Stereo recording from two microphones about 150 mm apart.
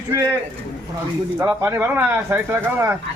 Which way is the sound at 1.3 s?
20° right (ahead or behind).